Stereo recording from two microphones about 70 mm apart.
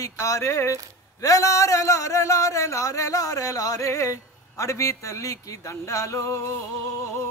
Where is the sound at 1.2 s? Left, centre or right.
Left.